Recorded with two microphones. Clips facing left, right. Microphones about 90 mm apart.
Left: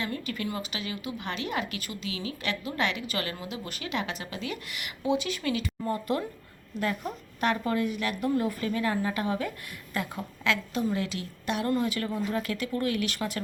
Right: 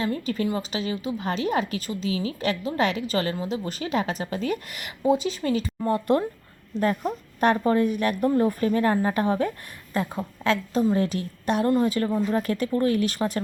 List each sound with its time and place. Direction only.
0.0 s speech: 35° right (ahead or behind)
5.9 s speech: 50° right (ahead or behind)
9.9 s speech: 30° right (ahead or behind)